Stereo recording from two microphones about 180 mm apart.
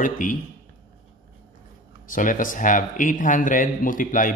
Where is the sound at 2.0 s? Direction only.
50° left (ahead or behind).